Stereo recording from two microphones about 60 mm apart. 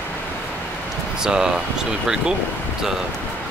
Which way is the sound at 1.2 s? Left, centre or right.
Centre.